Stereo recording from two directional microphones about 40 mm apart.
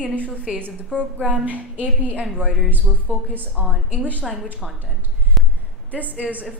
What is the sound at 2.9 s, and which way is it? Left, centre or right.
Speech, centre.